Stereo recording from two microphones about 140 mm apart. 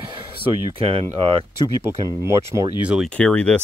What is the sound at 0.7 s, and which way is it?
Speech, 40° right (ahead or behind).